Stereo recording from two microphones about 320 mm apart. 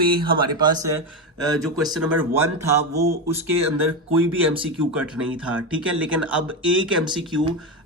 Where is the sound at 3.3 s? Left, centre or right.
Centre.